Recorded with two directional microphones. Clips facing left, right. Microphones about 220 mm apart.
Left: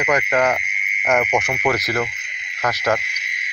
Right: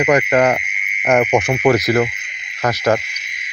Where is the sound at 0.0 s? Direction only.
30° right (ahead or behind).